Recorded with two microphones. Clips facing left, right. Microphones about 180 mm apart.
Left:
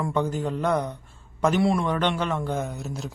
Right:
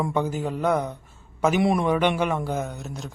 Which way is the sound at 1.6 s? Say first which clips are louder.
Right 2 dB; 15° right (ahead or behind).